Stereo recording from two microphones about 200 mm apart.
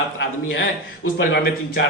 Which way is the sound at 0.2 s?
55° left (ahead or behind).